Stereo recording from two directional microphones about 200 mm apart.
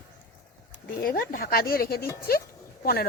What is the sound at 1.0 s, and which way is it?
Speech, 45° left (ahead or behind).